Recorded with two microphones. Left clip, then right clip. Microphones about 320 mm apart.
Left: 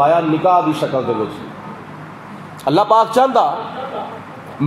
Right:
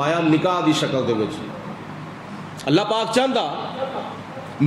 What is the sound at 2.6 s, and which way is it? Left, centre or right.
Speech, centre.